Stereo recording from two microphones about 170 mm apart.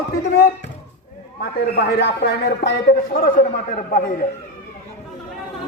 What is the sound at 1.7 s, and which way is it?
Speech, 75° left (ahead or behind).